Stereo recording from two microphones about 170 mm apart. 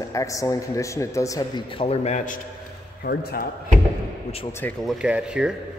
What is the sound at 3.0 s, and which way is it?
Speech, 65° left (ahead or behind).